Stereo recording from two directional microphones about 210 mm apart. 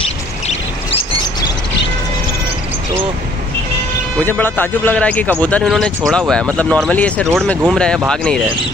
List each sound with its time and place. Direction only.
0.5 s chirp: 25° left (ahead or behind)
4.2 s a man's voice: 10° left (ahead or behind)